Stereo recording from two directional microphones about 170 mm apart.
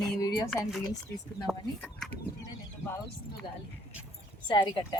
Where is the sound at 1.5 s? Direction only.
Centre (ahead or behind).